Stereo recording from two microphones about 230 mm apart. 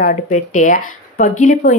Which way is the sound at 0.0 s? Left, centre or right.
Left.